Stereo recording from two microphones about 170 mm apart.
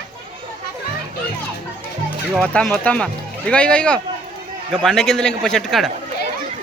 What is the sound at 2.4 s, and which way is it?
A man's voice, 5° left (ahead or behind).